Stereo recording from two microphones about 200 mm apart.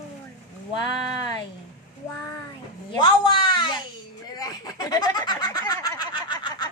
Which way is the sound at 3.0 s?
25° left (ahead or behind).